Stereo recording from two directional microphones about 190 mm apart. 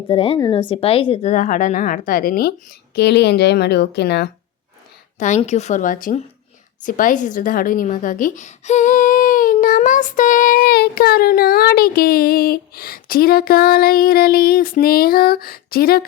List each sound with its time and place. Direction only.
0.1 s speech: 30° left (ahead or behind); by 2.5 s 50° left (ahead or behind)
2.9 s a woman's voice: 60° left (ahead or behind)
5.4 s a woman's voice: 35° left (ahead or behind); by 16.0 s 50° left (ahead or behind)